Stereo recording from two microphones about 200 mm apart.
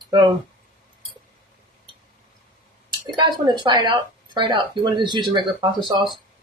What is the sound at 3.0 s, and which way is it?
Speech, 20° right (ahead or behind).